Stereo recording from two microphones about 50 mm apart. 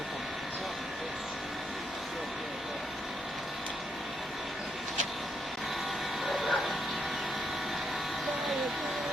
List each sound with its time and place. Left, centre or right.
6.2 s bow-wow: centre